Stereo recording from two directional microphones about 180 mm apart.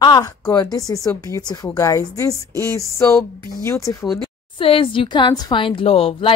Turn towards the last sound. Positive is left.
turn(degrees=30)  # may be behind; listen again after turning